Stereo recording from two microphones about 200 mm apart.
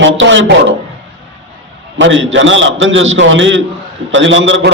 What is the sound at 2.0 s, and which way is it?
A man's voice, 65° right (ahead or behind).